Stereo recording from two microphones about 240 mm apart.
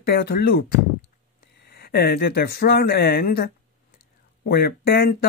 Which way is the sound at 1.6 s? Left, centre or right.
Left.